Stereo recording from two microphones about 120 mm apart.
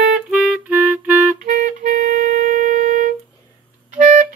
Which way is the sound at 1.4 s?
90° right.